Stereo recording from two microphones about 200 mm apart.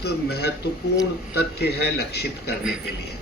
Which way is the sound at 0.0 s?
55° left (ahead or behind).